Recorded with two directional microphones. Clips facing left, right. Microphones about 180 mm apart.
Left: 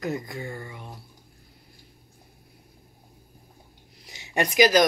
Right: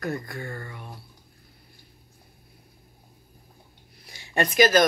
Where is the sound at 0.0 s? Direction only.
20° left (ahead or behind).